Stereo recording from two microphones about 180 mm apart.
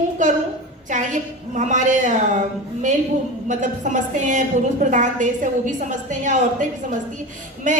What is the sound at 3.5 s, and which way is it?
A woman's voice, 45° right (ahead or behind).